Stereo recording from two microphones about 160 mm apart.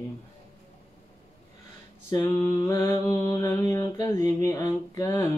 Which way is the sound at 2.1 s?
15° left (ahead or behind).